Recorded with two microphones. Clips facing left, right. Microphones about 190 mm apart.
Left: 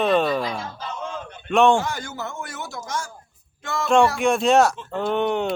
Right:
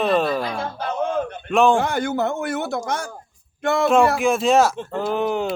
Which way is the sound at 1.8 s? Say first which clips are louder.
Right 9 dB; 60° right (ahead or behind).